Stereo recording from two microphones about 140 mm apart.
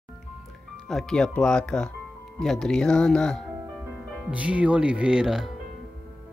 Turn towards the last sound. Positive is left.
turn(degrees=-5)  # may be behind; listen again after turning